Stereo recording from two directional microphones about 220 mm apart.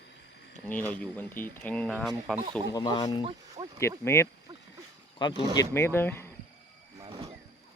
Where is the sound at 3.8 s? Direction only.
10° left (ahead or behind).